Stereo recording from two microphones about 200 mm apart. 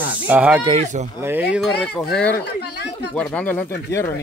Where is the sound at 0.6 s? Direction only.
30° right (ahead or behind).